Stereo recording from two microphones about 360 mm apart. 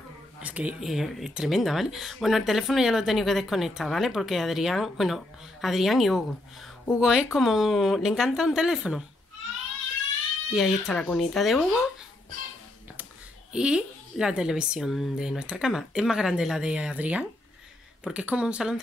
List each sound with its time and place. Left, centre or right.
0.4 s speech: centre
10.5 s speech: centre
13.5 s speech: centre